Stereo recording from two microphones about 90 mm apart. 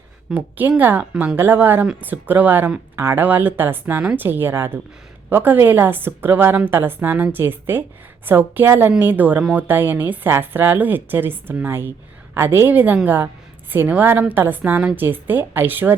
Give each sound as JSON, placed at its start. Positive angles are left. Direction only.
{"t": 0.3, "sound": "a woman's voice", "side_deg": -20}
{"t": 3.0, "sound": "a woman's voice", "side_deg": -30}